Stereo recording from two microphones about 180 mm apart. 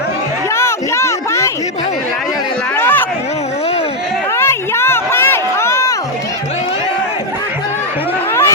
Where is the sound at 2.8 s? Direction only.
10° left (ahead or behind).